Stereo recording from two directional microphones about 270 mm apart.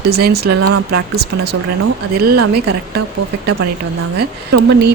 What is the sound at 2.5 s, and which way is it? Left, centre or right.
Speech, right.